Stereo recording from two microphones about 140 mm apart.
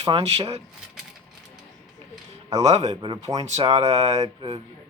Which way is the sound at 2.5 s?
50° right (ahead or behind).